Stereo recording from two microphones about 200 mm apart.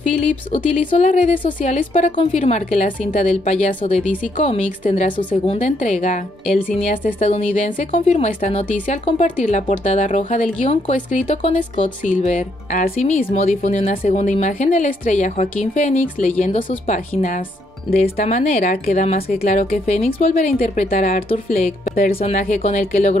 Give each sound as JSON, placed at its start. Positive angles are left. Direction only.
{"t": 0.5, "sound": "speech", "side_deg": 30}
{"t": 6.4, "sound": "speech", "side_deg": 0}
{"t": 7.2, "sound": "speech", "side_deg": 30}
{"t": 21.3, "sound": "speech", "side_deg": 30}